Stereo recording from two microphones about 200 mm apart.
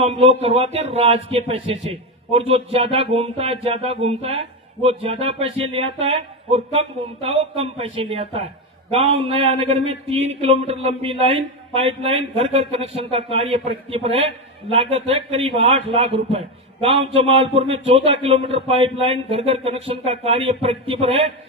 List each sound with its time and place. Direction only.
0.0 s speech: 30° right (ahead or behind)